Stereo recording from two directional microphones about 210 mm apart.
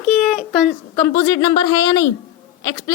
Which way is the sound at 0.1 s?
5° left (ahead or behind).